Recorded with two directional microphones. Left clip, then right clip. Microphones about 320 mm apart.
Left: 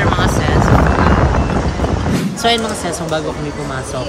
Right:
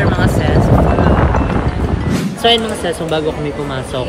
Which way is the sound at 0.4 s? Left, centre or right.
Right.